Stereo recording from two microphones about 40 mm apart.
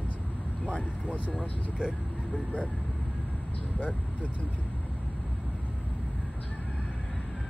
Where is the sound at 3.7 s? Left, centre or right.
Left.